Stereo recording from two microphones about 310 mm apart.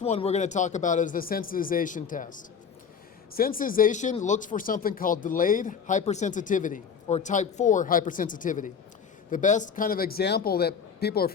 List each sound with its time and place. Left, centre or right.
0.0 s speech: centre